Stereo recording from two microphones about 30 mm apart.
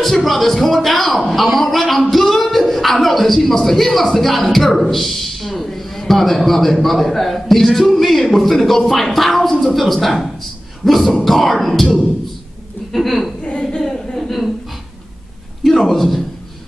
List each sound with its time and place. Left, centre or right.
0.0 s speech: centre
12.9 s speech: centre
13.4 s a woman's voice: left
13.7 s a sound: centre
15.6 s a man's voice: centre